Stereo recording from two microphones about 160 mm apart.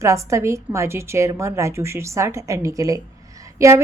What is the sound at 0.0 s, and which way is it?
A woman's voice, 20° right (ahead or behind).